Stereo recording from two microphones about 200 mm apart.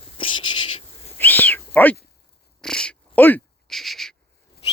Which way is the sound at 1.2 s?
10° left (ahead or behind).